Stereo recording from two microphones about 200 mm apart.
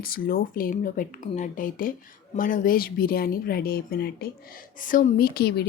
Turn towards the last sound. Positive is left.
turn(degrees=50)  # may be behind; listen again after turning